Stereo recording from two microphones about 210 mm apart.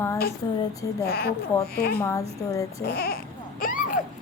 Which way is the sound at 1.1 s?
45° left (ahead or behind).